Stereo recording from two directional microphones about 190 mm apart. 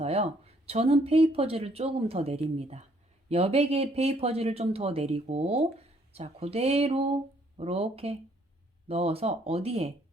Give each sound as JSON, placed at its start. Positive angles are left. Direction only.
{"t": 0.0, "sound": "speech", "side_deg": -35}